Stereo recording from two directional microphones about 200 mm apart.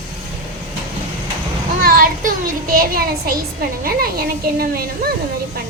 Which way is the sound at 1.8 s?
45° right (ahead or behind).